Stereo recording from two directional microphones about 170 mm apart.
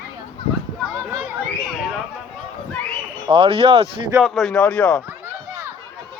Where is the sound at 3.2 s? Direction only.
30° right (ahead or behind).